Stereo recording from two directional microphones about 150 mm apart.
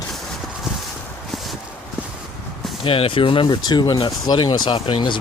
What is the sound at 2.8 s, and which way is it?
Speech, 40° left (ahead or behind).